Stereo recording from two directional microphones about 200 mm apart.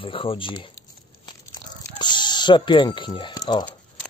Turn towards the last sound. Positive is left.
turn(degrees=20)  # may be behind; listen again after turning